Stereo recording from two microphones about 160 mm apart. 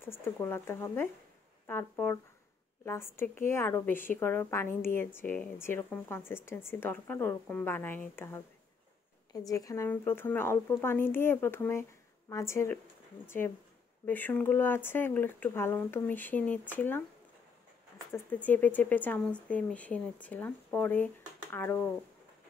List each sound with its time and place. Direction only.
0.0 s a woman's voice: 15° left (ahead or behind)
9.5 s a woman's voice: 20° left (ahead or behind)
14.0 s a woman's voice: 10° left (ahead or behind)
18.1 s a woman's voice: 10° left (ahead or behind)